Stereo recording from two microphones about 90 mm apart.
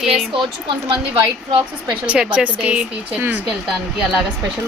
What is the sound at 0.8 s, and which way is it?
Speech, 70° right (ahead or behind).